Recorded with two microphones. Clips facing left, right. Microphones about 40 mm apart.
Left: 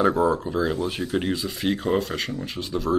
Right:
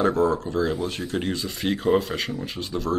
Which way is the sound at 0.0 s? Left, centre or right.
Centre.